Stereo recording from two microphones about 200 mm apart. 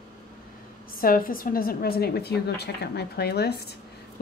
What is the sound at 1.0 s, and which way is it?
A woman's voice, 45° left (ahead or behind).